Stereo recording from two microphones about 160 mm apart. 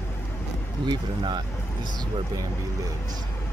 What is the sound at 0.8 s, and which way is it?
Speech, 30° right (ahead or behind).